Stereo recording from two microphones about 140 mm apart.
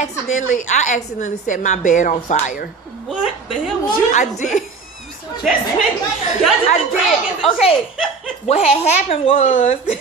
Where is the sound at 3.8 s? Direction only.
60° left (ahead or behind).